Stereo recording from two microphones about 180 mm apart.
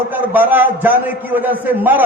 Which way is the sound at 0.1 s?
10° right (ahead or behind).